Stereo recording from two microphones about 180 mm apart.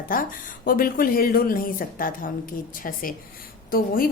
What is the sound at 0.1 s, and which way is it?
A woman's voice, 50° left (ahead or behind).